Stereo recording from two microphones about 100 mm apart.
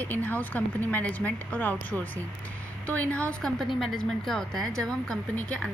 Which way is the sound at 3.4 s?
Centre (ahead or behind).